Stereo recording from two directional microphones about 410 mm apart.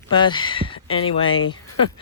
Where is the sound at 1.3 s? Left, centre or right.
Left.